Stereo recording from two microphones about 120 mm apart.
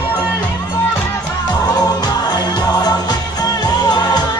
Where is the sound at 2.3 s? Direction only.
35° left (ahead or behind).